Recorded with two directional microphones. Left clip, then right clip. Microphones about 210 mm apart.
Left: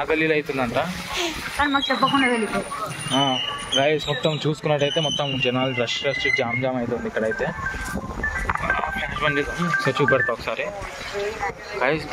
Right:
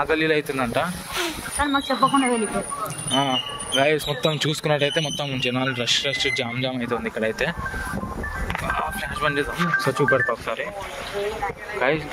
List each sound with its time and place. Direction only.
0.1 s speech: 25° right (ahead or behind); by 7.5 s 45° right (ahead or behind)
8.7 s speech: 15° right (ahead or behind)
10.1 s speech: 5° left (ahead or behind)
11.8 s speech: 5° left (ahead or behind)